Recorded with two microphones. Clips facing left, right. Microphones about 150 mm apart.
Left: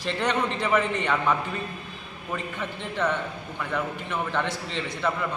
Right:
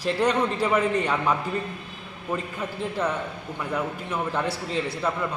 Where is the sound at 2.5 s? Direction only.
5° right (ahead or behind).